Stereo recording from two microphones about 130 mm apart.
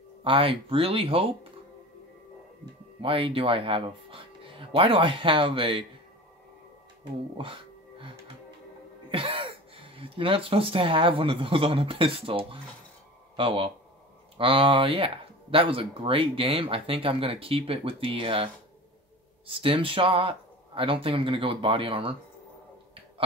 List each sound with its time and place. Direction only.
0.2 s speech: 40° right (ahead or behind)
3.0 s speech: 45° right (ahead or behind)
7.3 s music: 40° right (ahead or behind)
9.1 s speech: 45° right (ahead or behind)